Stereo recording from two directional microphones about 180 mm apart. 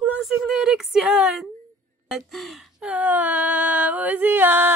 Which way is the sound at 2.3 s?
Centre (ahead or behind).